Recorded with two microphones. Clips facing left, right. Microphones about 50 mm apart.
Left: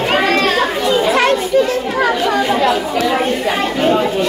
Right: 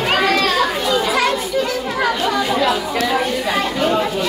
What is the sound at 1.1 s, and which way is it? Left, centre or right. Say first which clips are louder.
Children playing: left 5 dB; left.